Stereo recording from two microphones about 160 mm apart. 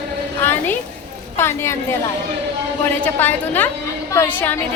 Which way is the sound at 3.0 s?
10° left (ahead or behind).